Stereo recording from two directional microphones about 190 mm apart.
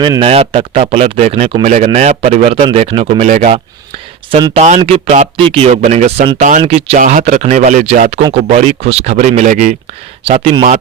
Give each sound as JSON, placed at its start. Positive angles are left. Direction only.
{"t": 0.0, "sound": "a man's voice", "side_deg": -25}
{"t": 4.3, "sound": "speech", "side_deg": -20}
{"t": 4.5, "sound": "a man's voice", "side_deg": -40}